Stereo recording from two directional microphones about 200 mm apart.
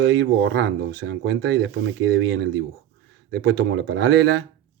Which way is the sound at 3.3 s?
60° right (ahead or behind).